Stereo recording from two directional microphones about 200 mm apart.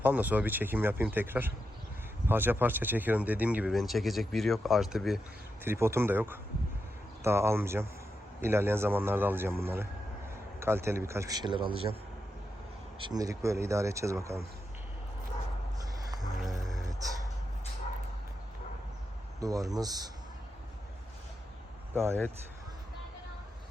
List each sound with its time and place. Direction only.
0.0 s speech: 10° right (ahead or behind)
5.6 s speech: 15° right (ahead or behind)
13.0 s speech: 20° right (ahead or behind)
16.4 s music: centre (ahead or behind)
19.4 s speech: 15° right (ahead or behind)
21.9 s speech: 15° right (ahead or behind)